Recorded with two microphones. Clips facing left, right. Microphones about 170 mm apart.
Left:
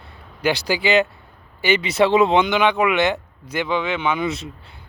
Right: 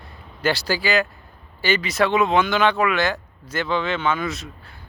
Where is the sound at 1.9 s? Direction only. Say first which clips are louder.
Left 4 dB; 30° left (ahead or behind).